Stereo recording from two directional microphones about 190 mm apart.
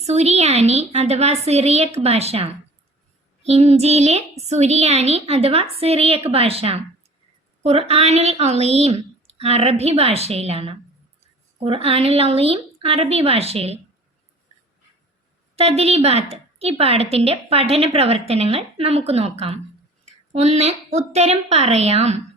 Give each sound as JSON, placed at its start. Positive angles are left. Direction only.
{"t": 0.0, "sound": "a woman's voice", "side_deg": -35}
{"t": 15.5, "sound": "a woman's voice", "side_deg": -30}